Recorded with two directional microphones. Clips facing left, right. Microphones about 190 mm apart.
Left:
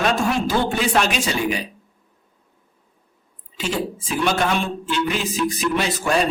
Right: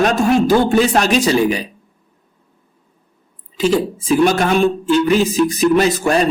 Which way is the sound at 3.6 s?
40° right (ahead or behind).